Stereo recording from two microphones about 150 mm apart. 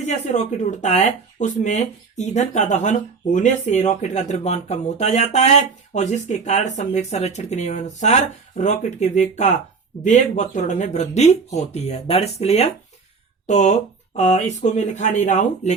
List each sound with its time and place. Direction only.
0.3 s speech: 55° left (ahead or behind)